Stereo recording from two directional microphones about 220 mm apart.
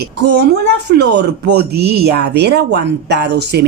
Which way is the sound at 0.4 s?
50° right (ahead or behind).